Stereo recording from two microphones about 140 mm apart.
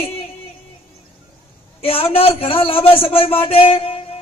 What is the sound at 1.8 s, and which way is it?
A man's voice, 45° left (ahead or behind).